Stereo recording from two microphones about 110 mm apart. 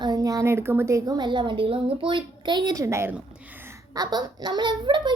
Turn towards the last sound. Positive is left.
turn(degrees=-45)  # may be behind; listen again after turning